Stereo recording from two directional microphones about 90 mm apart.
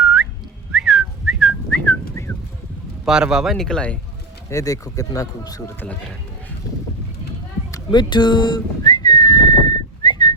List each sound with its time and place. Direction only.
0.0 s whistling: 10° right (ahead or behind)
1.7 s whistling: 15° left (ahead or behind)
3.0 s speech: 10° right (ahead or behind); by 3.9 s 10° left (ahead or behind)
4.4 s speech: 40° left (ahead or behind)
5.8 s speech: 15° left (ahead or behind)
7.9 s whistling: 60° left (ahead or behind)